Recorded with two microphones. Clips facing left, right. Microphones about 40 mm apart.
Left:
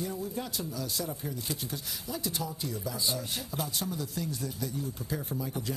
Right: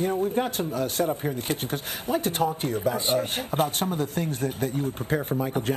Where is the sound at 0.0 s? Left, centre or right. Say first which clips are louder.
Right 11 dB; right.